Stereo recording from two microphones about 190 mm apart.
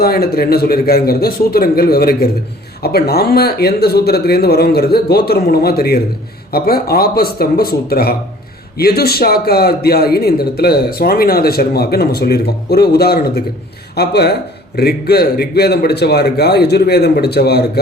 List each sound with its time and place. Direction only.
0.0 s a man's voice: 55° left (ahead or behind)